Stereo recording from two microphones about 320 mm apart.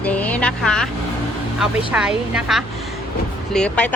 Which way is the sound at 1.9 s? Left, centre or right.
Centre.